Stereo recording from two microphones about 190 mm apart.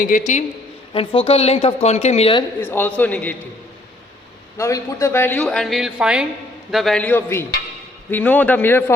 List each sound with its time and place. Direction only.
0.0 s a woman's voice: 40° left (ahead or behind)
0.9 s a woman's voice: 30° left (ahead or behind)
2.6 s a woman's voice: 10° left (ahead or behind)
4.5 s a woman's voice: 15° left (ahead or behind)